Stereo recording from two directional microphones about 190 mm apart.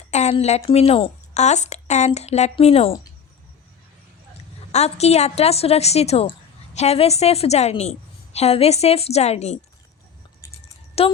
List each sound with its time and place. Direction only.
0.1 s a woman's voice: 35° left (ahead or behind)
4.7 s a woman's voice: 35° left (ahead or behind)
11.0 s a woman's voice: 30° left (ahead or behind)